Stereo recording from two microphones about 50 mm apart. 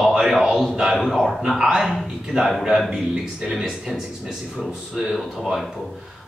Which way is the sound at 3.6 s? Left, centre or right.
Centre.